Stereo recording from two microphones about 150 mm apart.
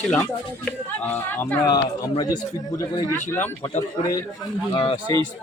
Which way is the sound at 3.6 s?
30° left (ahead or behind).